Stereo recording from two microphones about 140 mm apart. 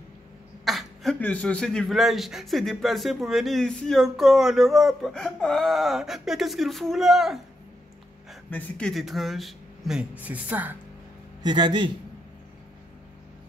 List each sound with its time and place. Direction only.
0.7 s throat clearing: centre (ahead or behind)
1.2 s a man's voice: 10° left (ahead or behind)
8.5 s a man's voice: 10° left (ahead or behind); by 10.8 s 10° right (ahead or behind)
11.4 s a man's voice: 30° right (ahead or behind)